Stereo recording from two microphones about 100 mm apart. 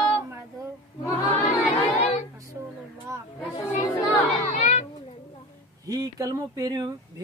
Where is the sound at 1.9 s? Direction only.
90° left.